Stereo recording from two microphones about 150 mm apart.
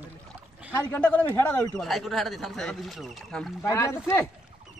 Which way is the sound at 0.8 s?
10° left (ahead or behind).